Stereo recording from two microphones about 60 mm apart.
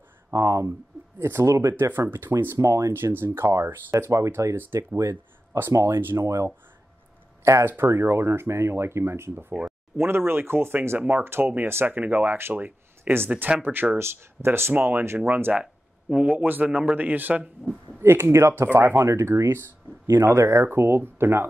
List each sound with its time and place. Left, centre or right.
0.3 s speech: right
1.9 s speech: right
2.6 s speech: right
2.9 s speech: right
7.6 s speech: right
9.5 s speech: right
9.9 s speech: right
13.9 s speech: right
14.7 s speech: right
15.5 s a sound: centre
16.3 s speech: right
18.0 s speech: right
19.0 s speech: right